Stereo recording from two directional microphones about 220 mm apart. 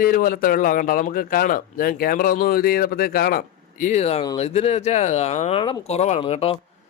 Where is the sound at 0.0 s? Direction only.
40° left (ahead or behind).